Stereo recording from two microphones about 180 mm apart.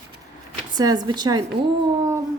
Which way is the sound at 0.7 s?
20° right (ahead or behind).